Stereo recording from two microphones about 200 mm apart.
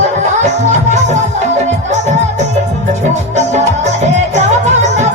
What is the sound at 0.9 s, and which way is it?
Music, 35° right (ahead or behind).